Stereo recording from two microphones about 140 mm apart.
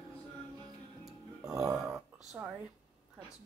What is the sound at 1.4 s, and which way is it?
Burping, 25° right (ahead or behind).